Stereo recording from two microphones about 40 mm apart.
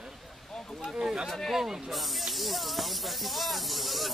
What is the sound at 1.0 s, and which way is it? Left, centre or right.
Speech, centre.